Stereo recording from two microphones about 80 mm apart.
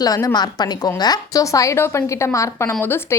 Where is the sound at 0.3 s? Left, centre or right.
Left.